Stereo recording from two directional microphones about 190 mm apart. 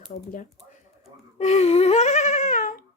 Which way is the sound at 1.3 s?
35° left (ahead or behind).